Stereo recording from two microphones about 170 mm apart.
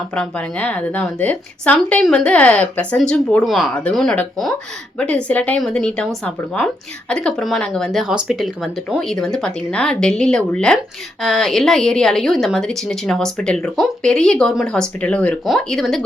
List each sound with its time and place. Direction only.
0.1 s a woman's voice: 5° left (ahead or behind)